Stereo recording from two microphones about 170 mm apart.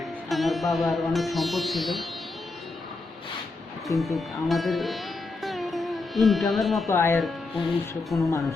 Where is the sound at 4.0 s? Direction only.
Centre (ahead or behind).